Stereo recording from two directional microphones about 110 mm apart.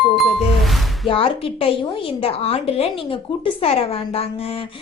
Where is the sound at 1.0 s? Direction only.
55° left (ahead or behind).